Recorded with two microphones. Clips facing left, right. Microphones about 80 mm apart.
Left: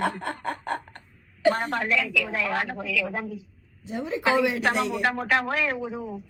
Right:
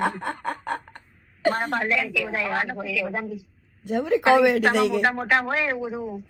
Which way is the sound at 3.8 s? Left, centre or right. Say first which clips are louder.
Right 6 dB; right.